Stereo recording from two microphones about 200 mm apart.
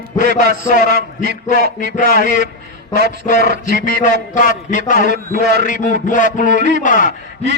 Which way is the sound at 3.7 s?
45° left (ahead or behind).